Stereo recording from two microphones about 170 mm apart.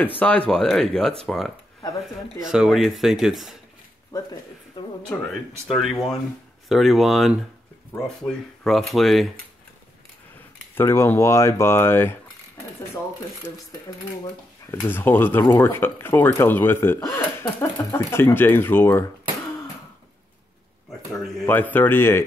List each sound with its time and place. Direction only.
0.2 s speech: 5° left (ahead or behind)
4.1 s speech: 25° left (ahead or behind)
5.1 s speech: centre (ahead or behind)
10.7 s speech: 15° left (ahead or behind)
13.7 s speech: 20° left (ahead or behind)
21.5 s speech: 10° left (ahead or behind)